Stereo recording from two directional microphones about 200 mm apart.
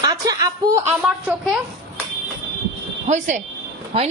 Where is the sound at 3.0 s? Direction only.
35° right (ahead or behind).